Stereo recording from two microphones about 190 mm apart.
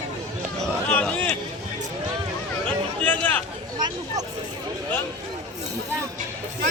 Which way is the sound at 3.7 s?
20° right (ahead or behind).